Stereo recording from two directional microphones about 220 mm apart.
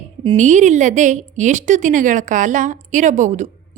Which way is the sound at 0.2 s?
30° right (ahead or behind).